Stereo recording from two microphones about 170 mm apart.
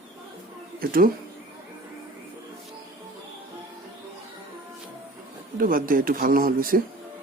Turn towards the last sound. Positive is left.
turn(degrees=-55)  # may be behind; listen again after turning